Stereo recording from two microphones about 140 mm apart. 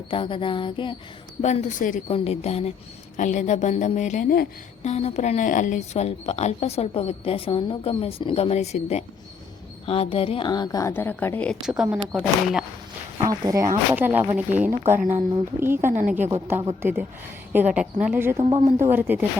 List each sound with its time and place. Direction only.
0.1 s a sound: 40° left (ahead or behind)
1.4 s speech: 55° left (ahead or behind)
2.0 s speech: 45° left (ahead or behind)
3.2 s speech: 60° left (ahead or behind); by 4.4 s 80° left
4.8 s a woman's voice: 50° left (ahead or behind); by 11.5 s 10° left (ahead or behind)
11.6 s speech: 5° right (ahead or behind)
13.1 s speech: 25° right (ahead or behind)
14.8 s a woman's voice: 65° right (ahead or behind)
16.8 s speech: 15° right (ahead or behind)
18.3 s speech: 40° right (ahead or behind)
18.8 s speech: 15° right (ahead or behind)